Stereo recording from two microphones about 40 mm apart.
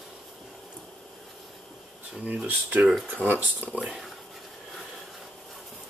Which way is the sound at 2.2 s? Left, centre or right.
Right.